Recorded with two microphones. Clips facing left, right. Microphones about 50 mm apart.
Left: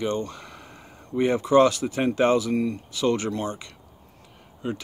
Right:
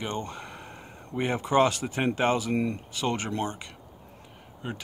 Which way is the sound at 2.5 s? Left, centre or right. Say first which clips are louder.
Left 3 dB; right.